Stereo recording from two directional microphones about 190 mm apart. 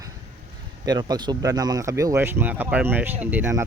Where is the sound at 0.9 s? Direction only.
20° right (ahead or behind).